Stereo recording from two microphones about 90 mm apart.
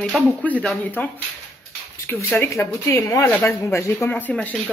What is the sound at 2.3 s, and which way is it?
Speech, 35° left (ahead or behind).